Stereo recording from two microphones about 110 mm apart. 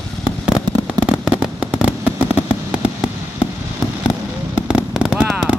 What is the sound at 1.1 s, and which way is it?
Fireworks, 5° right (ahead or behind).